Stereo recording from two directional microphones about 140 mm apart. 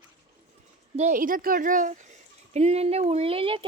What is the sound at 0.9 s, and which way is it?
Speech, 65° right (ahead or behind).